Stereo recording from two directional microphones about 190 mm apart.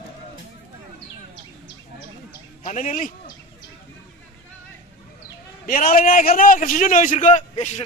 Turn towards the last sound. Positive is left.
turn(degrees=35)  # may be behind; listen again after turning